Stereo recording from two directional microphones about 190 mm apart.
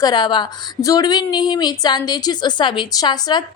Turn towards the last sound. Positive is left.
turn(degrees=25)  # may be behind; listen again after turning